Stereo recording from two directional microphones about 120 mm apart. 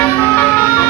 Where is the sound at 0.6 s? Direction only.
30° left (ahead or behind).